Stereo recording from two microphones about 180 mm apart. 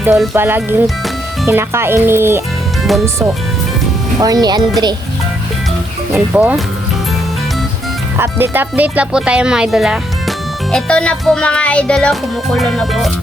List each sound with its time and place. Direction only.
0.3 s speech: 10° right (ahead or behind)
2.8 s speech: centre (ahead or behind)
4.2 s speech: 20° right (ahead or behind)
6.1 s speech: 10° right (ahead or behind)
8.2 s speech: 10° right (ahead or behind)